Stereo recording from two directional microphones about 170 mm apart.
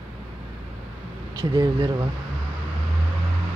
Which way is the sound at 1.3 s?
25° right (ahead or behind).